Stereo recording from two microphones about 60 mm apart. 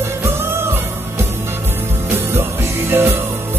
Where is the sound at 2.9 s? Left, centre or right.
Right.